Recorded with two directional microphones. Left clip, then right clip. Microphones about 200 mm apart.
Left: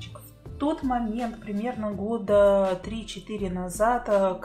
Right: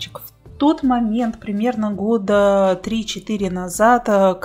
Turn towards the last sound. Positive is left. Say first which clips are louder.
# right 9 dB
turn(degrees=-40)  # may be behind; listen again after turning